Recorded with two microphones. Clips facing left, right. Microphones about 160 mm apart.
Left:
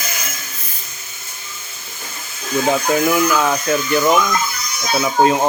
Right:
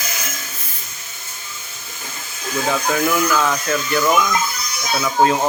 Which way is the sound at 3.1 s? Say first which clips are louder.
Left 2 dB; 20° left (ahead or behind).